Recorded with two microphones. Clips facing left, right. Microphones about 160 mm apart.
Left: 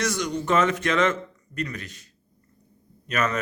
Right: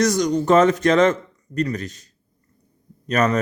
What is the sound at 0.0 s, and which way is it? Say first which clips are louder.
Speech: right 8 dB; 40° right (ahead or behind).